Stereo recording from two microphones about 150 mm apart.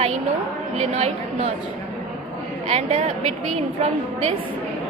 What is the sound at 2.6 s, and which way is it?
Speech, 45° right (ahead or behind).